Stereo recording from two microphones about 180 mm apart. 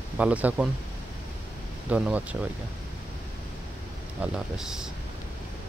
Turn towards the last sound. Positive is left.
turn(degrees=-5)  # may be behind; listen again after turning